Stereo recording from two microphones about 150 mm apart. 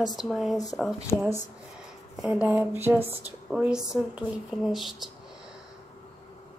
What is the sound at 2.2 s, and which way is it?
Speech, 10° right (ahead or behind).